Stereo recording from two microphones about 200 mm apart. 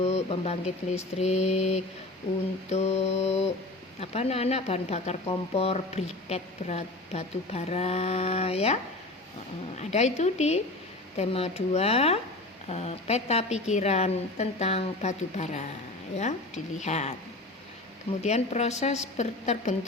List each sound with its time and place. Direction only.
0.0 s speech: 30° left (ahead or behind)
16.8 s speech: 35° left (ahead or behind)
18.2 s speech: 35° left (ahead or behind)